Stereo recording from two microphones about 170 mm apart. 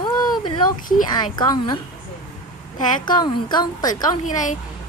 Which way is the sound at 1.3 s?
25° left (ahead or behind).